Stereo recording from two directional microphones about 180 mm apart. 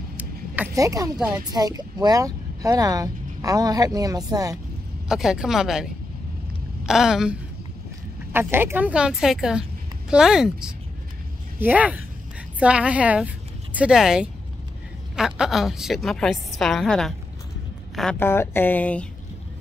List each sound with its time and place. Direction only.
0.2 s vehicle: 15° right (ahead or behind)
1.1 s a woman's voice: 5° right (ahead or behind)
1.5 s speech: 20° right (ahead or behind)
5.0 s a woman's voice: 5° right (ahead or behind)
6.9 s a woman's voice: 5° right (ahead or behind)
18.2 s speech: 15° left (ahead or behind)